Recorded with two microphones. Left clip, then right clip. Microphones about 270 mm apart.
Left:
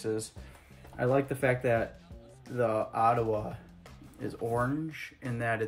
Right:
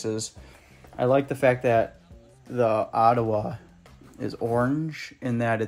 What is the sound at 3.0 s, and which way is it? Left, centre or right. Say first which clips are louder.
Speech: right 5 dB; right.